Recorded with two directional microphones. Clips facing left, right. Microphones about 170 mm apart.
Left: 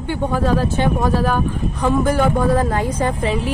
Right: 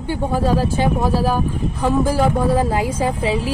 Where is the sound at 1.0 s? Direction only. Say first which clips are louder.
Even; 35° right (ahead or behind).